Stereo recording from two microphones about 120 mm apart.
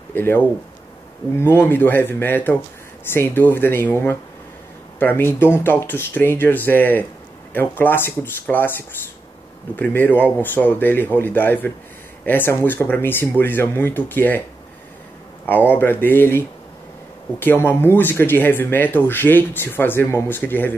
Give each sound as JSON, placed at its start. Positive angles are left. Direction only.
{"t": 0.1, "sound": "speech", "side_deg": 15}
{"t": 4.9, "sound": "speech", "side_deg": 15}
{"t": 15.7, "sound": "speech", "side_deg": 15}